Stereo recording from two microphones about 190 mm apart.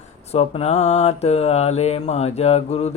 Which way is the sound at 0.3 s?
35° left (ahead or behind).